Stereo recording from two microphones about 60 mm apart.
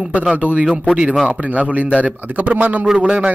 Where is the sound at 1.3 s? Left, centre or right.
Right.